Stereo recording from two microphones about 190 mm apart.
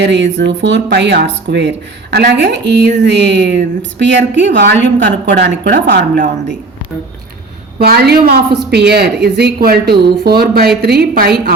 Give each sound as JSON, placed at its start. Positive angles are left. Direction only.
{"t": 0.0, "sound": "a woman's voice", "side_deg": -65}
{"t": 7.8, "sound": "speech", "side_deg": -55}